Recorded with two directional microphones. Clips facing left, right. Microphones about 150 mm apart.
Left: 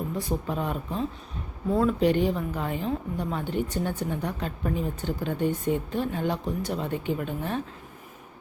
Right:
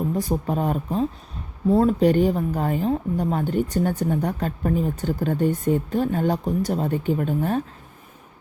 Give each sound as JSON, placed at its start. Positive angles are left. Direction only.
{"t": 0.2, "sound": "speech", "side_deg": -40}